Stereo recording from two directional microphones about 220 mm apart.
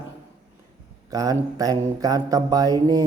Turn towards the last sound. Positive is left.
turn(degrees=-15)  # may be behind; listen again after turning